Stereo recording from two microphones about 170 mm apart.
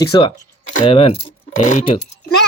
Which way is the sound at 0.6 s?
40° left (ahead or behind).